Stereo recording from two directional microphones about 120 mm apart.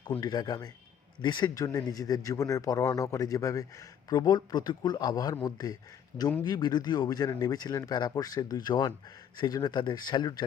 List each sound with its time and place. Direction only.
0.2 s speech: 35° left (ahead or behind)